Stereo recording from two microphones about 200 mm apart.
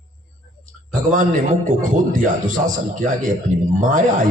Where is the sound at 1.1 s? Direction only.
40° right (ahead or behind).